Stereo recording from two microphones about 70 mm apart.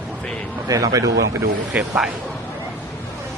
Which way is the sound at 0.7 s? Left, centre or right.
Right.